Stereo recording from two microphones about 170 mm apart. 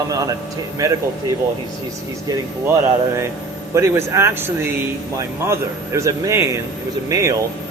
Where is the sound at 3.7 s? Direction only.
15° right (ahead or behind).